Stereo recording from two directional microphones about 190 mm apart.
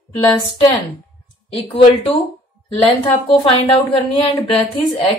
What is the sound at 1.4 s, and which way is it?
A woman's voice, 30° left (ahead or behind).